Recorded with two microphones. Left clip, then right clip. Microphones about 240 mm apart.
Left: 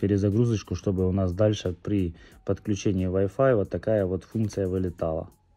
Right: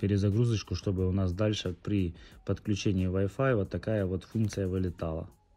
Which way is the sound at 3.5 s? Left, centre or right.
Centre.